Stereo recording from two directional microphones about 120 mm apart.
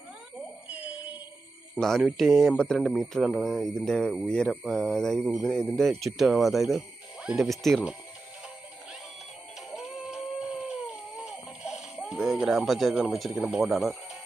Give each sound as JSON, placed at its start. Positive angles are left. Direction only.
{"t": 0.3, "sound": "cat", "side_deg": -10}
{"t": 1.8, "sound": "speech", "side_deg": 0}
{"t": 9.6, "sound": "music", "side_deg": 0}
{"t": 11.2, "sound": "a sound", "side_deg": -5}
{"t": 13.4, "sound": "speech", "side_deg": -5}